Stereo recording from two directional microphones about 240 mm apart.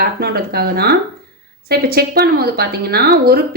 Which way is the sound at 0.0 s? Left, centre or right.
Right.